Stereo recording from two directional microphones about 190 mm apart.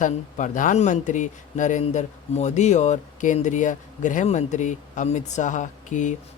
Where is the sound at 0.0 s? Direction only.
40° left (ahead or behind).